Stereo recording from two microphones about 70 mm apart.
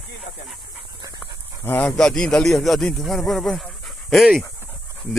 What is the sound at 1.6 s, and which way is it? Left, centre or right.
Speech, left.